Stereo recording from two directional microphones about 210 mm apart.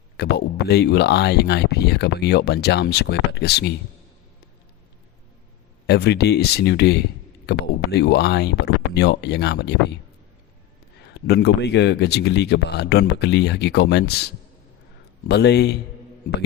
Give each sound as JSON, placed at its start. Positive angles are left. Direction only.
{"t": 0.2, "sound": "speech", "side_deg": 50}
{"t": 5.8, "sound": "speech", "side_deg": 50}
{"t": 11.1, "sound": "speech", "side_deg": 50}
{"t": 15.3, "sound": "speech", "side_deg": 50}